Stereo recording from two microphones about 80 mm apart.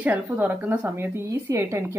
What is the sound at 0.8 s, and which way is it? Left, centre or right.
Speech, right.